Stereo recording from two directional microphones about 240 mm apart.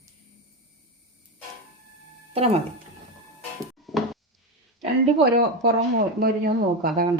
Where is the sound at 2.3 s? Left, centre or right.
Right.